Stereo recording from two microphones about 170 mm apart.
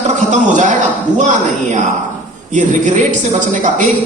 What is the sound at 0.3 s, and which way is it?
Speech, 45° right (ahead or behind).